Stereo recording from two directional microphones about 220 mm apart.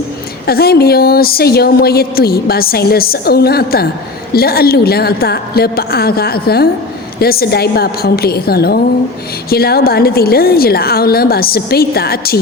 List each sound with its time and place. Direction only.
0.4 s a woman's voice: 45° left (ahead or behind)